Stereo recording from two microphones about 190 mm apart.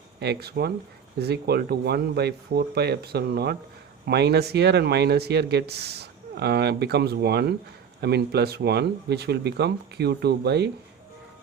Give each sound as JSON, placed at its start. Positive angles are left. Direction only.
{"t": 0.2, "sound": "speech", "side_deg": -60}